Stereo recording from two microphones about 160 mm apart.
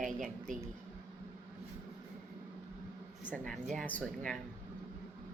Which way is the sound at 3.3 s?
5° left (ahead or behind).